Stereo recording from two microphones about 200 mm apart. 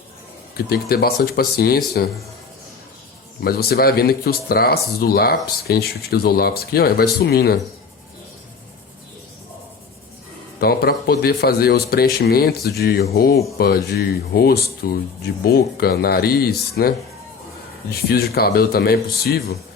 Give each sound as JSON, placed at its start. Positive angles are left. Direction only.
{"t": 0.5, "sound": "speech", "side_deg": 50}
{"t": 3.4, "sound": "speech", "side_deg": 50}
{"t": 10.6, "sound": "speech", "side_deg": 50}
{"t": 18.1, "sound": "speech", "side_deg": 50}